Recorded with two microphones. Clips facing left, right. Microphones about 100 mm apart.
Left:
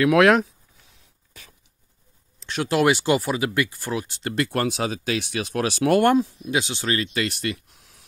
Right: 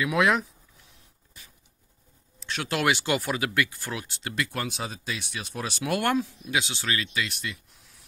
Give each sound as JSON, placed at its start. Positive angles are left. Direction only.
{"t": 0.0, "sound": "speech", "side_deg": 75}
{"t": 2.5, "sound": "speech", "side_deg": 35}
{"t": 4.2, "sound": "speech", "side_deg": 45}
{"t": 5.9, "sound": "speech", "side_deg": 35}
{"t": 7.2, "sound": "speech", "side_deg": 65}